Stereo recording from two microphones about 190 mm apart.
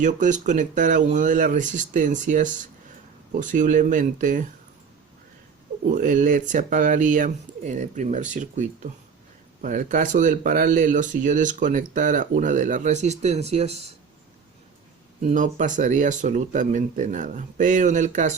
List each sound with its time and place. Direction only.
0.0 s speech: 40° right (ahead or behind)
5.9 s speech: 45° right (ahead or behind)
15.2 s speech: 40° right (ahead or behind)